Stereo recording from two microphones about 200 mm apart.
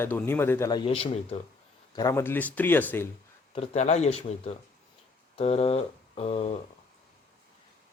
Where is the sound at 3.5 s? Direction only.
30° left (ahead or behind).